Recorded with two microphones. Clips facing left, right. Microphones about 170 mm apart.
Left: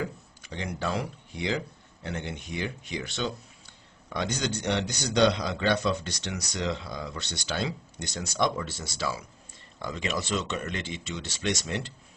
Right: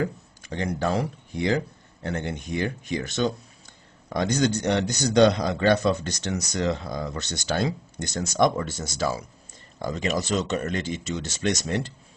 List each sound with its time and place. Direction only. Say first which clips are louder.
0.0 s a man's voice: right 6 dB; 50° right (ahead or behind)